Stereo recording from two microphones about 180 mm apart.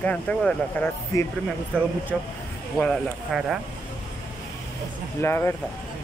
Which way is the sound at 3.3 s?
Centre (ahead or behind).